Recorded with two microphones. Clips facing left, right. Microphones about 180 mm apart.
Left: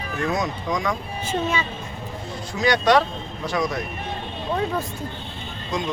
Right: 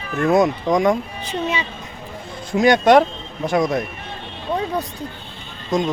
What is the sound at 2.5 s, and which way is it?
Speech, 50° right (ahead or behind).